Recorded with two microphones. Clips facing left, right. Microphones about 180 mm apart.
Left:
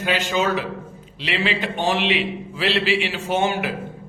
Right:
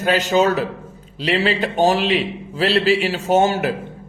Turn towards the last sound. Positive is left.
turn(degrees=-40)  # may be behind; listen again after turning